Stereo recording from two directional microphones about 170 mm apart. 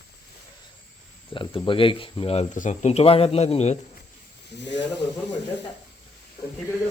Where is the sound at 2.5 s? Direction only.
45° left (ahead or behind).